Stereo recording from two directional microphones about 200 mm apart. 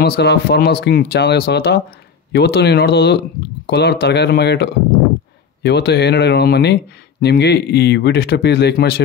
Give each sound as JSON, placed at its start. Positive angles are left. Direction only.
{"t": 0.0, "sound": "speech", "side_deg": 55}